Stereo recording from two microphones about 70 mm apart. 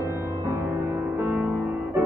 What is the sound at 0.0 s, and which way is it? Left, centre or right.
Music, right.